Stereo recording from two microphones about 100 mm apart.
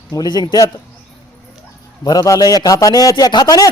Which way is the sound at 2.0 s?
40° left (ahead or behind).